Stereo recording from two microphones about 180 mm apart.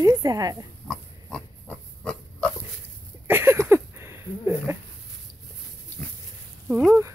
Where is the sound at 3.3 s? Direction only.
15° right (ahead or behind).